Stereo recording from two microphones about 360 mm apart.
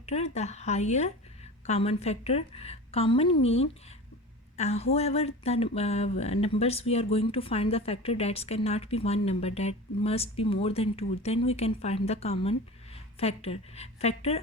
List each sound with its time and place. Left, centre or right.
0.0 s speech: centre